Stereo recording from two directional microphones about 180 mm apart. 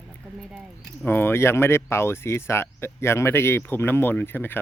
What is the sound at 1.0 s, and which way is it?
A man's voice, 10° left (ahead or behind).